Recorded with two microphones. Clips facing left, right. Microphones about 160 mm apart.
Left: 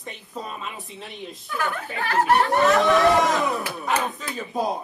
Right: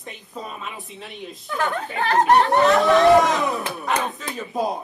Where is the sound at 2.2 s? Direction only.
25° right (ahead or behind).